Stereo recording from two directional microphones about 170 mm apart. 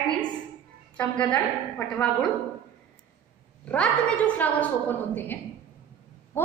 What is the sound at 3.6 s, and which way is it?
A woman's voice, 10° left (ahead or behind).